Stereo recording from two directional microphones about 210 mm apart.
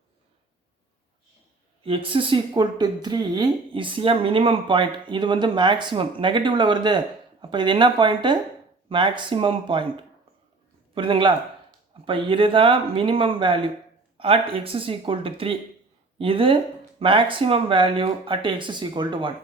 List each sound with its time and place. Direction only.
1.8 s speech: 25° right (ahead or behind)
10.9 s speech: 25° right (ahead or behind)